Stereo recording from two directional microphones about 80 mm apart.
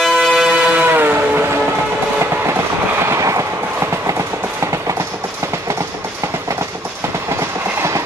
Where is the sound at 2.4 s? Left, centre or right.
Right.